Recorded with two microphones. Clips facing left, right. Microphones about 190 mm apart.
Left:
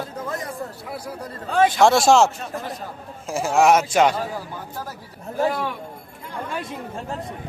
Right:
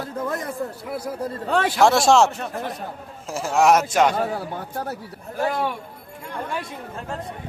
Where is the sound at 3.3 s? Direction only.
Centre (ahead or behind).